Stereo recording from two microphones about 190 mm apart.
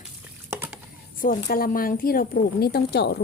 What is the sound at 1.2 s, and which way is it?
A woman's voice, 45° left (ahead or behind).